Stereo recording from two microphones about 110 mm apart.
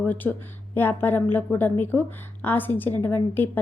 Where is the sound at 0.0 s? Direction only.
15° left (ahead or behind).